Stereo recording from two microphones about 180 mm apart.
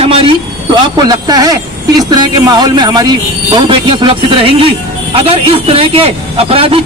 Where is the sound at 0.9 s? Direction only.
20° right (ahead or behind).